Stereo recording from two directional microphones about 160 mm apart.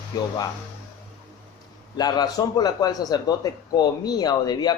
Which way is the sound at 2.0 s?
25° left (ahead or behind).